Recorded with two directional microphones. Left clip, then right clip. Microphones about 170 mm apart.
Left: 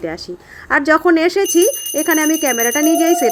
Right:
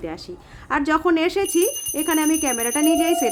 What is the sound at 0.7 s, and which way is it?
Speech, 20° left (ahead or behind).